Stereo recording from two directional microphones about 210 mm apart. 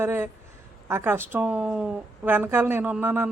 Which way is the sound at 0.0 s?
10° right (ahead or behind).